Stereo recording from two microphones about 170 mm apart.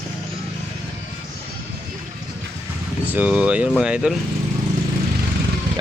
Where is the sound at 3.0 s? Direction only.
10° right (ahead or behind).